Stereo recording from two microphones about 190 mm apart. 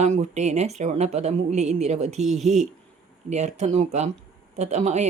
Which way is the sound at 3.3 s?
35° right (ahead or behind).